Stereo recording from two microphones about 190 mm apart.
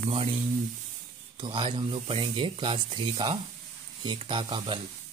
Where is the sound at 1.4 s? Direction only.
25° right (ahead or behind).